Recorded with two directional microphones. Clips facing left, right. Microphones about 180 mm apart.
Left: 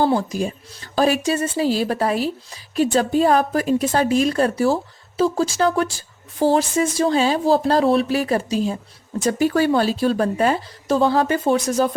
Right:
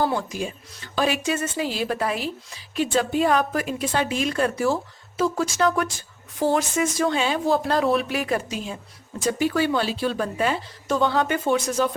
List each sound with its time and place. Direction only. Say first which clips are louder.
0.0 s a woman's voice: left 5 dB; 35° left (ahead or behind)